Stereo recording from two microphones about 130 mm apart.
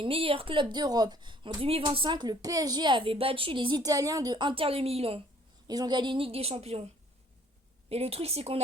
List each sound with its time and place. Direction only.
0.0 s a woman's voice: 45° right (ahead or behind)
5.6 s a woman's voice: 30° right (ahead or behind); by 8.6 s 50° right (ahead or behind)